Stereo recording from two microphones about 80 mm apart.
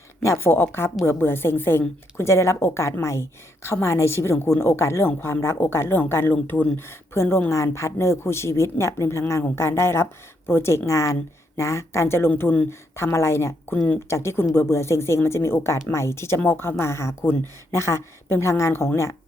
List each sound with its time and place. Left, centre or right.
0.2 s a woman's voice: left
12.4 s speech: left
13.0 s a woman's voice: left
13.7 s speech: centre
14.1 s a woman's voice: left